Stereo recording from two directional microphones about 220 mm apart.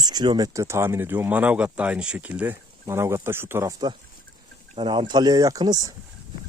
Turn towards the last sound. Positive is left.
turn(degrees=-20)  # may be behind; listen again after turning